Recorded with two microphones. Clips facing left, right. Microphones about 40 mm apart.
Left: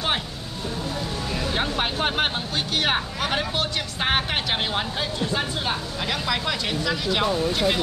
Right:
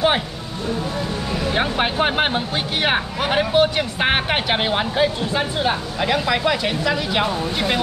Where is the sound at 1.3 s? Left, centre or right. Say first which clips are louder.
Right 5 dB; centre.